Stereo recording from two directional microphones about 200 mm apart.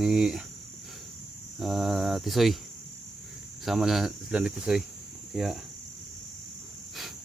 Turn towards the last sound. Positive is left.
turn(degrees=0)  # may be behind; listen again after turning